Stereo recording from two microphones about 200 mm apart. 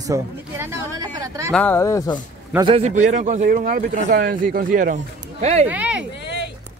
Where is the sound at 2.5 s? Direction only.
30° right (ahead or behind).